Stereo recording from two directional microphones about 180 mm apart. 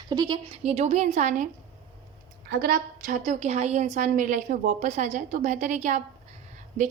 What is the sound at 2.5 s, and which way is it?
A woman's voice, 55° right (ahead or behind).